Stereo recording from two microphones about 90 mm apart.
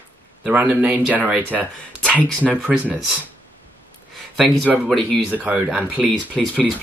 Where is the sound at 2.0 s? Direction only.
10° left (ahead or behind).